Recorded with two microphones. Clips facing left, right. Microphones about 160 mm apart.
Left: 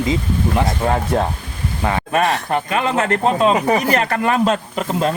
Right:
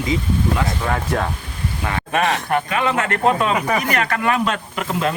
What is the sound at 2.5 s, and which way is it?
Speech, 35° left (ahead or behind).